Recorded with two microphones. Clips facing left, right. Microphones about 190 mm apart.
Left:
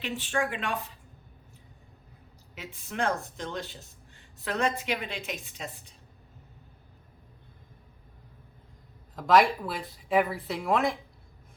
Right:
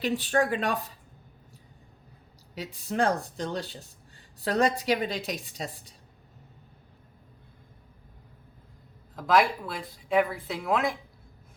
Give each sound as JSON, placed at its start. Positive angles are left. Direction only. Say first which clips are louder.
{"t": 0.0, "sound": "a woman's voice", "louder": "right 5 dB", "side_deg": -40}
{"t": 2.6, "sound": "a woman's voice", "louder": "right 5 dB", "side_deg": -35}
{"t": 9.1, "sound": "speech", "louder": "left 2 dB", "side_deg": 0}